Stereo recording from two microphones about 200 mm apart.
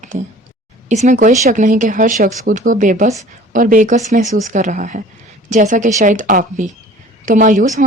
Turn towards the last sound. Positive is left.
turn(degrees=-40)  # may be behind; listen again after turning